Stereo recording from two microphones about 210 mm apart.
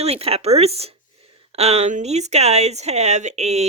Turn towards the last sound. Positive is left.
turn(degrees=-30)  # may be behind; listen again after turning